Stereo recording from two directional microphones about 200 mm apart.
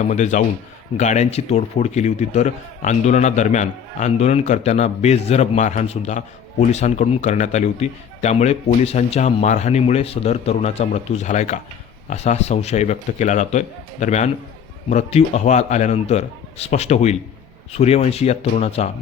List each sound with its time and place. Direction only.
0.0 s a man's voice: 35° left (ahead or behind)